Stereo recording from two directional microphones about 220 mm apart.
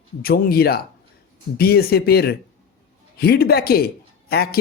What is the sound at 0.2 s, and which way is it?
A man's voice, 45° left (ahead or behind).